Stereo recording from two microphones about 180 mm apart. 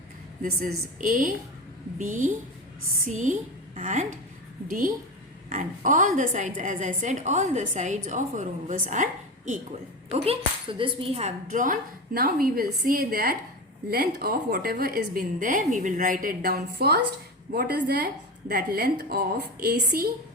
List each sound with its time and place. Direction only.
0.4 s a woman's voice: 55° right (ahead or behind)
5.5 s a woman's voice: 45° right (ahead or behind)
10.1 s a woman's voice: 30° right (ahead or behind); by 20.1 s 60° right (ahead or behind)